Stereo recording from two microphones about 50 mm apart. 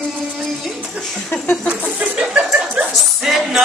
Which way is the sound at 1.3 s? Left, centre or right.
Left.